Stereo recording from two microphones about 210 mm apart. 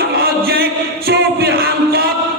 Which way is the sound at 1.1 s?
50° right (ahead or behind).